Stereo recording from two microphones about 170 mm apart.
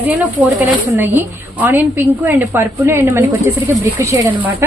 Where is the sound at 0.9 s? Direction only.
10° right (ahead or behind).